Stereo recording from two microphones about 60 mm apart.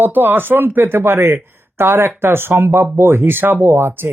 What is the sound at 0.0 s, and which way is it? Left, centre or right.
Speech, right.